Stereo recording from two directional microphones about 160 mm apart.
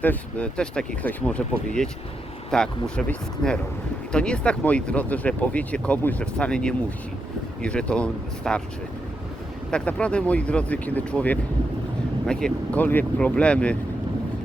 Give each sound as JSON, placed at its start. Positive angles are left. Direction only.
{"t": 0.0, "sound": "speech", "side_deg": 10}
{"t": 9.7, "sound": "speech", "side_deg": 5}